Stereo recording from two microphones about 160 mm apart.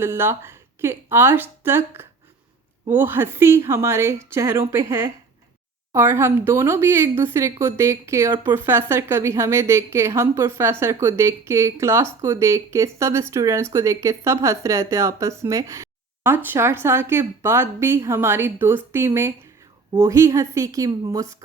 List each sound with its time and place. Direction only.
0.0 s a woman's voice: 15° right (ahead or behind)